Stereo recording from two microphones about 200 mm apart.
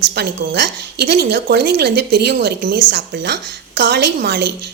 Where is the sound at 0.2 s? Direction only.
60° right (ahead or behind).